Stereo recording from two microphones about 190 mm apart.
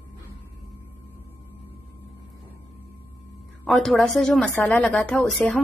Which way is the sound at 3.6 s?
Centre (ahead or behind).